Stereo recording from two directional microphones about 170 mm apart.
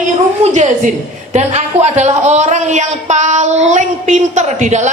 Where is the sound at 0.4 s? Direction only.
45° right (ahead or behind).